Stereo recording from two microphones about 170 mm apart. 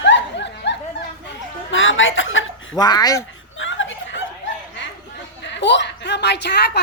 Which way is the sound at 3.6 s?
90° left.